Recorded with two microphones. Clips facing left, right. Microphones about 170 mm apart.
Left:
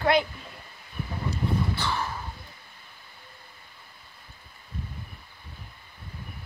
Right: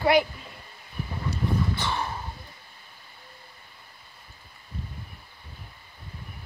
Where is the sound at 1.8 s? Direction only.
20° right (ahead or behind).